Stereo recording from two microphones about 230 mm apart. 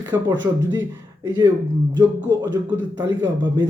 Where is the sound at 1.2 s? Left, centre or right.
Centre.